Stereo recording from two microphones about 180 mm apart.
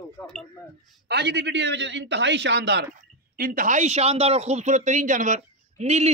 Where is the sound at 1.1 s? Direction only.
70° right (ahead or behind).